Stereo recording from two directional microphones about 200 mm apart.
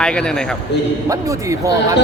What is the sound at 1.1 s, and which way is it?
Speech, 15° right (ahead or behind).